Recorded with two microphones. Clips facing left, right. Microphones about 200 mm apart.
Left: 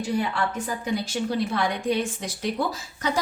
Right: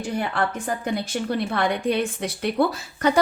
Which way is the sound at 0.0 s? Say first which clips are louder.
Even; 55° right (ahead or behind).